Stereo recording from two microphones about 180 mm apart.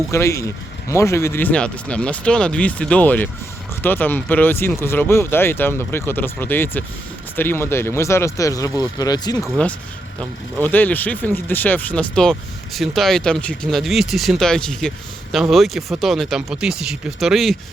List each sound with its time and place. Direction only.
0.1 s speech: 15° left (ahead or behind)
9.4 s speech: 5° left (ahead or behind)